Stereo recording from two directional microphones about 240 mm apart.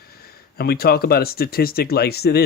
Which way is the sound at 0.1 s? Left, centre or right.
Left.